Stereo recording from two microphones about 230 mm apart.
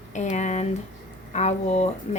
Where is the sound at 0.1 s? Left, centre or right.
Left.